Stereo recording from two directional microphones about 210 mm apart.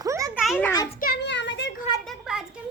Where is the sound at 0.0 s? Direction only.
15° right (ahead or behind).